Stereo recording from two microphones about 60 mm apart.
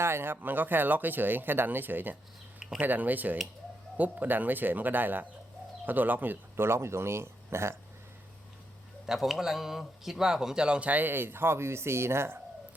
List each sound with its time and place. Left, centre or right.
0.0 s speech: right
9.0 s speech: centre; by 12.4 s right